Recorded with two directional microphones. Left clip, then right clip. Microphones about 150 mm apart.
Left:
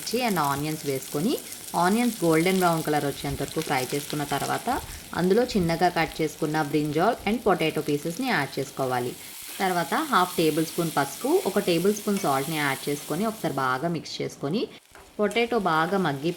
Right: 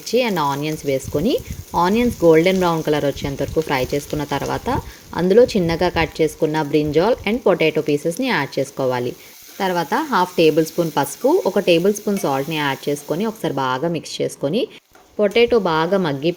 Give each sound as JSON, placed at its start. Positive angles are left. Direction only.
{"t": 0.0, "sound": "speech", "side_deg": -25}